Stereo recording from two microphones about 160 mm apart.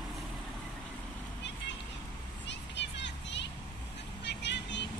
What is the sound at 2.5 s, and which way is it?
Vehicle, 90° left.